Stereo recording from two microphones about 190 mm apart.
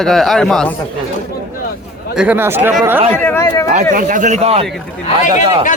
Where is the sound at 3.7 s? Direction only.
40° right (ahead or behind).